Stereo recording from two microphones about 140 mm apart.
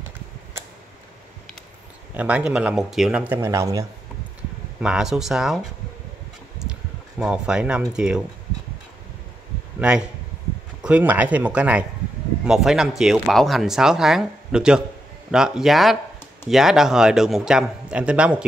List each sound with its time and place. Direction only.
2.1 s speech: 10° right (ahead or behind)
3.3 s speech: 20° right (ahead or behind)
4.7 s speech: 5° right (ahead or behind)
9.8 s speech: 5° right (ahead or behind)